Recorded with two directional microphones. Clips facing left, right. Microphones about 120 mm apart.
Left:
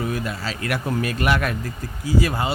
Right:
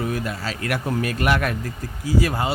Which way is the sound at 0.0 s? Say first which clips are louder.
Even; 45° right (ahead or behind).